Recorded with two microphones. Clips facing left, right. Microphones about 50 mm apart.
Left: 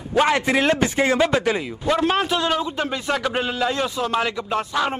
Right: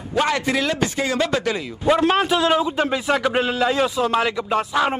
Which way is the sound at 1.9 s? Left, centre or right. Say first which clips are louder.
Right 3 dB; centre.